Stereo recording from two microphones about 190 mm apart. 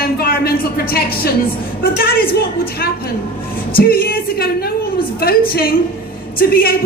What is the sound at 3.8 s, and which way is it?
A man's voice, 50° left (ahead or behind).